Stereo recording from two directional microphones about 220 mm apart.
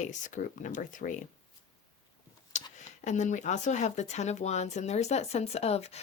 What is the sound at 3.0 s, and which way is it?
Speech, 35° left (ahead or behind).